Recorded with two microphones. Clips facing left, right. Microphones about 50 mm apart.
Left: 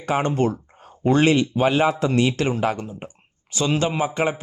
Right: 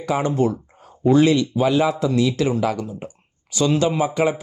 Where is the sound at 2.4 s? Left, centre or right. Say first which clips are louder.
Right 2 dB; left.